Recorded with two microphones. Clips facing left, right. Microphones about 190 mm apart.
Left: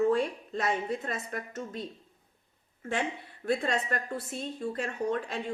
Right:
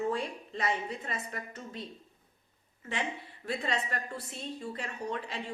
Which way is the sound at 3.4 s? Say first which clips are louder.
Left 5 dB; 50° left (ahead or behind).